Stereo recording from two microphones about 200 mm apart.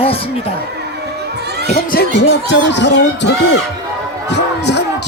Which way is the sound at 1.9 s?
55° left (ahead or behind).